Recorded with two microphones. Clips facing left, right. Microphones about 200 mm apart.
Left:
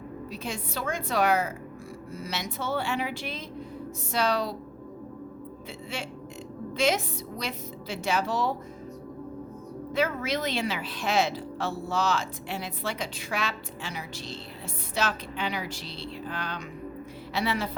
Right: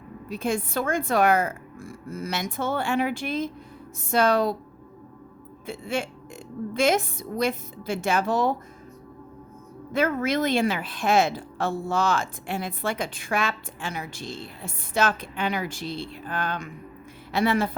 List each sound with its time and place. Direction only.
0.3 s speech: 50° right (ahead or behind)
5.6 s speech: 50° right (ahead or behind)
9.9 s speech: 50° right (ahead or behind)